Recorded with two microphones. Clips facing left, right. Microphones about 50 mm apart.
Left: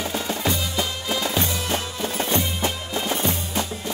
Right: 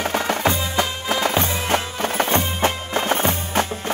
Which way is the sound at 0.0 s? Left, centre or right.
Right.